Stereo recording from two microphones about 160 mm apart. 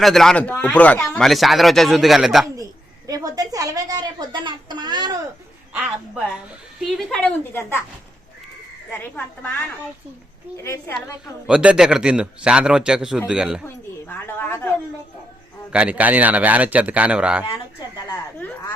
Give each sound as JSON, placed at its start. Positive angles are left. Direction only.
{"t": 0.0, "sound": "speech", "side_deg": 0}
{"t": 3.1, "sound": "a woman's voice", "side_deg": -20}
{"t": 6.7, "sound": "speech", "side_deg": 0}
{"t": 8.9, "sound": "a woman's voice", "side_deg": 10}
{"t": 10.6, "sound": "a woman's voice", "side_deg": 15}
{"t": 11.4, "sound": "speech", "side_deg": -5}
{"t": 14.1, "sound": "a sound", "side_deg": 10}
{"t": 15.7, "sound": "a man's voice", "side_deg": -5}